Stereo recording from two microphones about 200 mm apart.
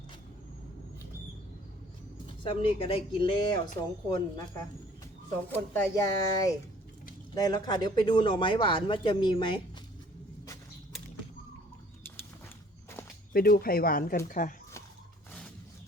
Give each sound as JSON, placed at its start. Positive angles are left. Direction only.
{"t": 2.4, "sound": "speech", "side_deg": 25}
{"t": 13.3, "sound": "speech", "side_deg": 45}